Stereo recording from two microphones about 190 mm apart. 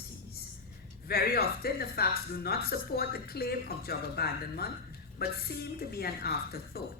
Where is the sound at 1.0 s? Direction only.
55° left (ahead or behind).